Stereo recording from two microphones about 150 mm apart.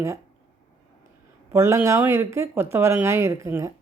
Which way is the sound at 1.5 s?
20° right (ahead or behind).